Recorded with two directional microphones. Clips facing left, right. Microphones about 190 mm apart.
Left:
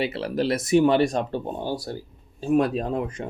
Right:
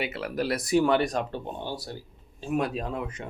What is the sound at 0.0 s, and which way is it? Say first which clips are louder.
Speech: left 5 dB; 30° left (ahead or behind).